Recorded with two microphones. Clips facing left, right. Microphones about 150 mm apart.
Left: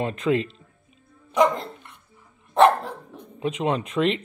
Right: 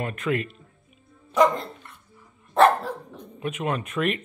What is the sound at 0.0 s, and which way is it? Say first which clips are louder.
Speech: left 4 dB; 25° left (ahead or behind).